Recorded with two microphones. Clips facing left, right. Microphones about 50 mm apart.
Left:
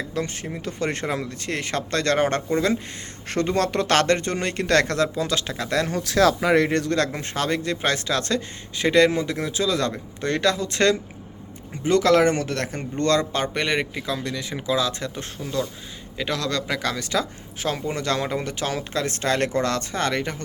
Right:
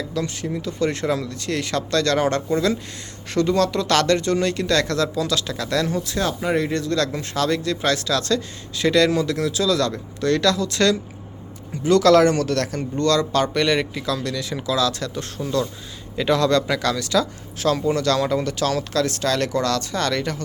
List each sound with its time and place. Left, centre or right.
0.1 s speech: left
5.9 s speech: left
6.7 s speech: left
16.1 s speech: centre
16.9 s speech: left